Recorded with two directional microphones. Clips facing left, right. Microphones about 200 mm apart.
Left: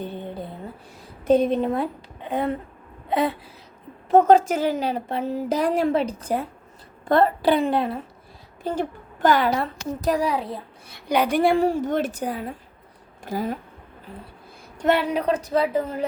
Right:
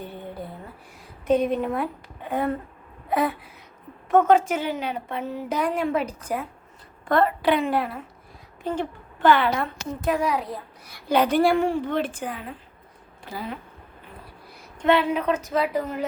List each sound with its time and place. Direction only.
0.0 s a sound: 20° left (ahead or behind)
1.3 s a woman's voice: 30° left (ahead or behind)
4.1 s a woman's voice: 35° left (ahead or behind)
8.6 s a woman's voice: 40° left (ahead or behind)
11.1 s speech: 10° left (ahead or behind)
11.5 s a woman's voice: 40° left (ahead or behind)
14.8 s a woman's voice: 40° left (ahead or behind)